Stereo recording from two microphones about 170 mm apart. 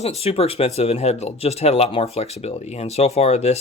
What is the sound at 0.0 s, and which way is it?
Speech, 40° left (ahead or behind).